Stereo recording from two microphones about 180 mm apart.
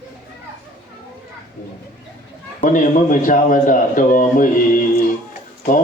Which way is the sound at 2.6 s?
45° left (ahead or behind).